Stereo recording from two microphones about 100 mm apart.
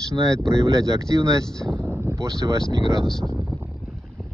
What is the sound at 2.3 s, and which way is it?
Speech, 40° right (ahead or behind).